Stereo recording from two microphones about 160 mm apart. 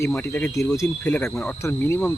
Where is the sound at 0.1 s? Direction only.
10° left (ahead or behind).